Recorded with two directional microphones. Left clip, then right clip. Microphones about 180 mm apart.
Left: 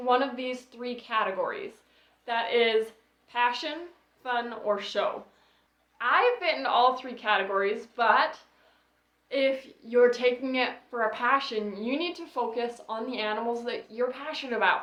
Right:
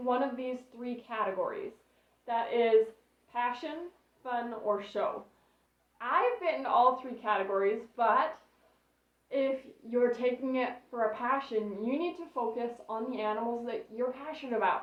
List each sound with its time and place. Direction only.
0.0 s a woman's voice: 25° left (ahead or behind)
9.3 s a woman's voice: 20° left (ahead or behind)